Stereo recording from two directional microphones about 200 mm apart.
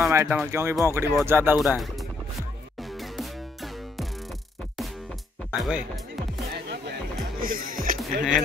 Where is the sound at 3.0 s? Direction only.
Centre (ahead or behind).